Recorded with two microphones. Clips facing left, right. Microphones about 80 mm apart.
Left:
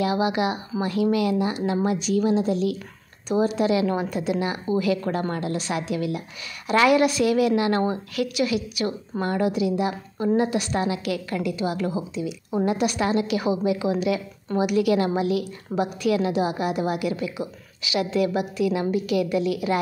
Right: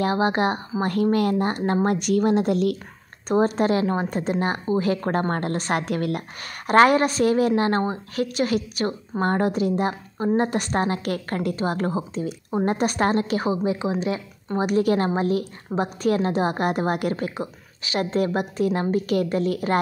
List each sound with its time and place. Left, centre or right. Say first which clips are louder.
0.0 s a woman's voice: right 1 dB; right